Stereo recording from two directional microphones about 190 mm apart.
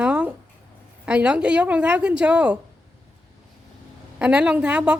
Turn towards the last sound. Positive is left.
turn(degrees=-5)  # may be behind; listen again after turning